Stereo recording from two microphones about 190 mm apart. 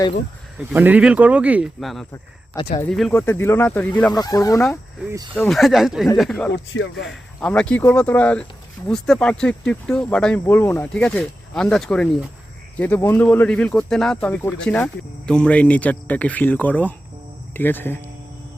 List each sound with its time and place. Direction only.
0.7 s speech: 10° right (ahead or behind)
2.6 s speech: 30° left (ahead or behind)
2.9 s speech: 5° left (ahead or behind)
5.3 s speech: 5° left (ahead or behind)
6.5 s speech: 70° left (ahead or behind)
7.4 s speech: 5° left (ahead or behind)